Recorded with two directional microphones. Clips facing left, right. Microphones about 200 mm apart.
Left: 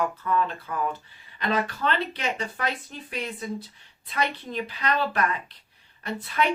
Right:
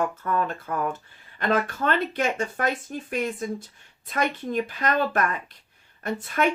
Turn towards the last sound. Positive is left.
turn(degrees=-50)  # may be behind; listen again after turning